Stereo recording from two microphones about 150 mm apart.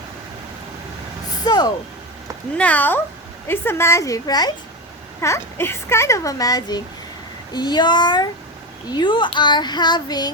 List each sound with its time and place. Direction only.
1.5 s a child's voice: 25° left (ahead or behind)
2.6 s a child's voice: 10° left (ahead or behind); by 10.3 s 25° left (ahead or behind)